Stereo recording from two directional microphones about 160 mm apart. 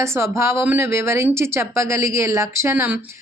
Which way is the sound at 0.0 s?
15° right (ahead or behind).